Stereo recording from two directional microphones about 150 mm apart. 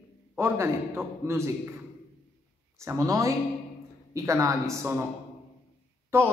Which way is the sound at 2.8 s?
20° right (ahead or behind).